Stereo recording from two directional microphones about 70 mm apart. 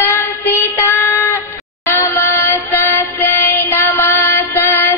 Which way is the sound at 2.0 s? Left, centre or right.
Left.